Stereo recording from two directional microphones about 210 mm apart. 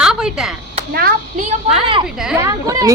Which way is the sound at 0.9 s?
45° right (ahead or behind).